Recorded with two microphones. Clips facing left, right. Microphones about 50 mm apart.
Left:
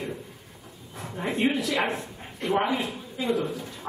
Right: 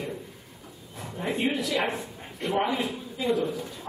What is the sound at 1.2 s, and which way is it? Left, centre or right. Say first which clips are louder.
A man's voice: left 2 dB; centre.